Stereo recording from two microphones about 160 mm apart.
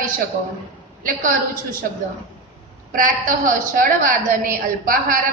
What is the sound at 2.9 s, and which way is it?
A woman's voice, 55° right (ahead or behind).